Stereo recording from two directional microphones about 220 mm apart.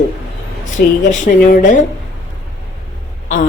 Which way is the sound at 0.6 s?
35° left (ahead or behind).